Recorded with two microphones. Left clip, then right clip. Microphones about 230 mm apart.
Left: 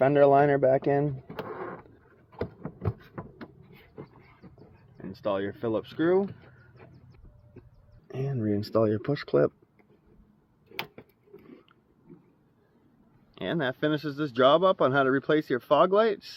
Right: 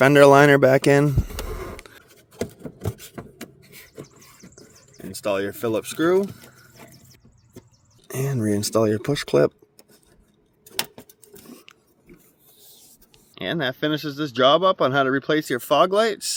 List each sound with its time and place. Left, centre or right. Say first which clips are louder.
0.0 s speech: right 8 dB; right
4.9 s speech: right 5 dB; centre
8.0 s speech: right 6 dB; right
13.3 s speech: right 4 dB; right